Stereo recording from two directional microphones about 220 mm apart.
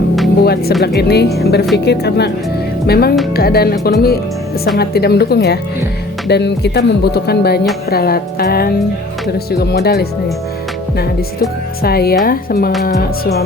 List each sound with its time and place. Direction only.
0.4 s speech: 45° left (ahead or behind)